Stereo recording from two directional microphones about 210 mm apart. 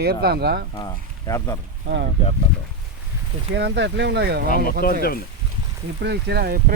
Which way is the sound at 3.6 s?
55° right (ahead or behind).